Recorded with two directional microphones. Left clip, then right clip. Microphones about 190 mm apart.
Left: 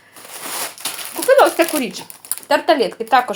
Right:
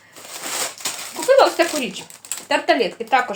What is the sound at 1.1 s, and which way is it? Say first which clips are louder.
Speech: left 2 dB; 40° left (ahead or behind).